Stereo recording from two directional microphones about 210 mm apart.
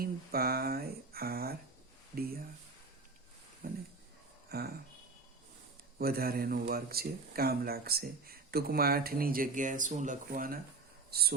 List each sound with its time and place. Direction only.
0.0 s speech: 45° right (ahead or behind)
3.6 s speech: 45° right (ahead or behind)
4.4 s a sound: 50° right (ahead or behind)
6.0 s speech: 45° right (ahead or behind)